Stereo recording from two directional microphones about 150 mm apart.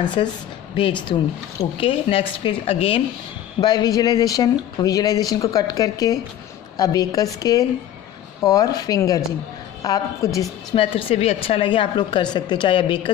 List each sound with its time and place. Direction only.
0.0 s speech: 30° left (ahead or behind)
1.8 s speech: 35° left (ahead or behind)
3.6 s speech: 25° left (ahead or behind)
10.7 s speech: 35° left (ahead or behind)